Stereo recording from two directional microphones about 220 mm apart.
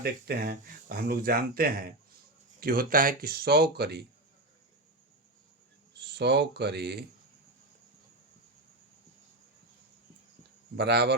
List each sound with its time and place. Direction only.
0.0 s speech: 45° right (ahead or behind)
5.9 s speech: 50° right (ahead or behind)
10.8 s speech: 50° right (ahead or behind)